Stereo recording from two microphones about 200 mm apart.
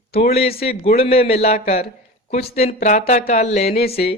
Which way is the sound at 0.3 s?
30° left (ahead or behind).